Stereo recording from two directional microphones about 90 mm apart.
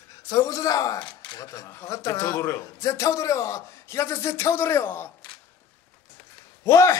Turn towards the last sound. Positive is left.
turn(degrees=35)  # may be behind; listen again after turning